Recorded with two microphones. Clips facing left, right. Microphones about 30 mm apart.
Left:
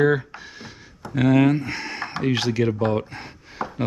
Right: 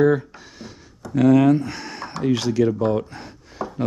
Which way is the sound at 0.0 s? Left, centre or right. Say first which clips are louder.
Right 2 dB; left.